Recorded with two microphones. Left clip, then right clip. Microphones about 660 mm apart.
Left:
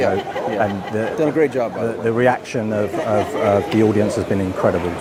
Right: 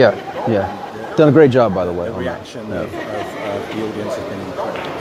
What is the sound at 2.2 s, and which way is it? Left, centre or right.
Speech, left.